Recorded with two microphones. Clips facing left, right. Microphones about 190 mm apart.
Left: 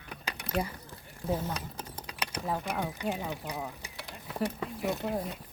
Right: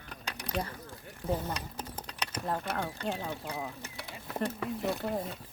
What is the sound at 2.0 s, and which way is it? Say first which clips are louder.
Speech: left 1 dB; 10° left (ahead or behind).